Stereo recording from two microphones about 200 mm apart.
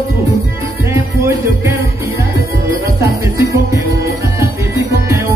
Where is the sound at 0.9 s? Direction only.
15° right (ahead or behind).